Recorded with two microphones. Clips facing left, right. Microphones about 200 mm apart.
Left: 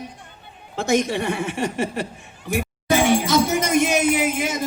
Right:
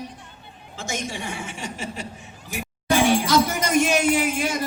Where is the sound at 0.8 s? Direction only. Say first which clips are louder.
Left 10 dB; 60° left (ahead or behind).